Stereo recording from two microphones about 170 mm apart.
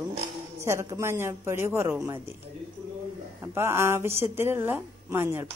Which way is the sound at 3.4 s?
15° right (ahead or behind).